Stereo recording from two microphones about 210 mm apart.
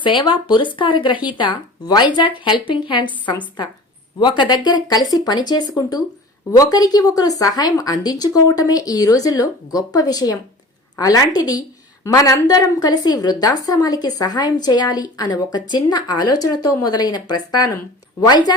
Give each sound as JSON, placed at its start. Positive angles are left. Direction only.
{"t": 0.0, "sound": "a woman's voice", "side_deg": 20}